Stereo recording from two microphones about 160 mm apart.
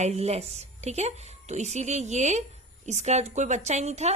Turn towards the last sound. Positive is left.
turn(degrees=-45)  # may be behind; listen again after turning